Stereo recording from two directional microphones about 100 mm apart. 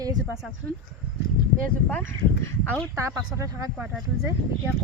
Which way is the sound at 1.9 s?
20° left (ahead or behind).